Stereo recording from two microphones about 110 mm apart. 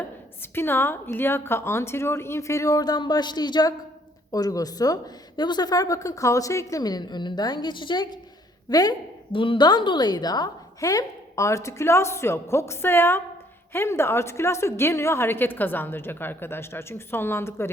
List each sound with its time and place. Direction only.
0.5 s a woman's voice: 20° left (ahead or behind); by 9.0 s 35° left (ahead or behind)
9.3 s a woman's voice: 50° left (ahead or behind); by 17.7 s 25° left (ahead or behind)